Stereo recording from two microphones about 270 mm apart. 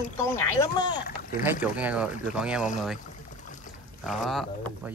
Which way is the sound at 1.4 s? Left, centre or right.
Centre.